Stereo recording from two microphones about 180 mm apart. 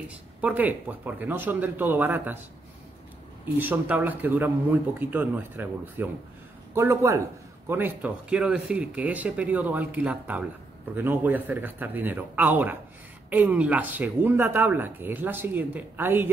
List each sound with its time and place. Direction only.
0.4 s speech: 10° right (ahead or behind)
3.5 s speech: 10° right (ahead or behind)